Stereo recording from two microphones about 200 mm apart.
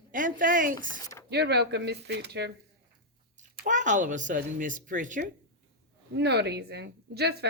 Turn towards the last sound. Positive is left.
turn(degrees=-55)  # may be behind; listen again after turning